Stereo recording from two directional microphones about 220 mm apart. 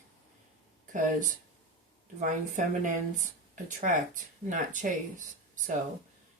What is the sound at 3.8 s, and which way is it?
Speech, 35° right (ahead or behind).